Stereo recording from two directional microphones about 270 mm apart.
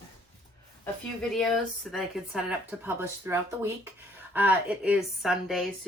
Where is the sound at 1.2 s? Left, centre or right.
Centre.